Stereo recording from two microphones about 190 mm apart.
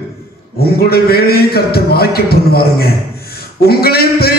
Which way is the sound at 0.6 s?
55° left (ahead or behind).